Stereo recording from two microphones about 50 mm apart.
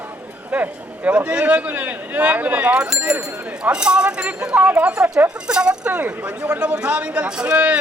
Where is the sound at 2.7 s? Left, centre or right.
Centre.